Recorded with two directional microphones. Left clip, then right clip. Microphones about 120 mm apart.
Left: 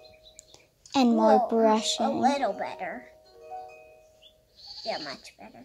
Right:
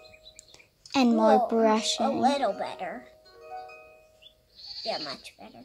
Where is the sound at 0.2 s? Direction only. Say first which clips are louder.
Right 1 dB; 5° left (ahead or behind).